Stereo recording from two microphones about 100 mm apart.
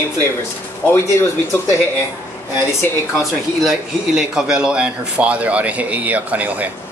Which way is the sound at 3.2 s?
5° right (ahead or behind).